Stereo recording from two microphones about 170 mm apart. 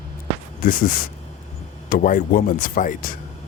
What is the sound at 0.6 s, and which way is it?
Speech, 55° left (ahead or behind).